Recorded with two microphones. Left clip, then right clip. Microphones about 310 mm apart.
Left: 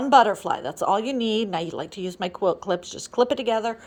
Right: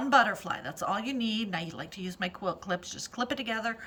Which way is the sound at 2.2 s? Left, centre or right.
Centre.